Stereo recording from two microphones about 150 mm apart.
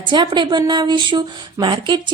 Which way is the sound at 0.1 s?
30° right (ahead or behind).